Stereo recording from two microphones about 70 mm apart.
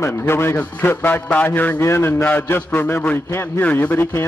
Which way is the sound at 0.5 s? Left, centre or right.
Left.